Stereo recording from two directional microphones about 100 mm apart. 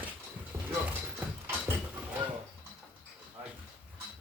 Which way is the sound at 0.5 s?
15° right (ahead or behind).